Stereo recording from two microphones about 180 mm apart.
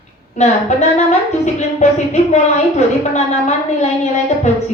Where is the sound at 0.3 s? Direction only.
40° left (ahead or behind).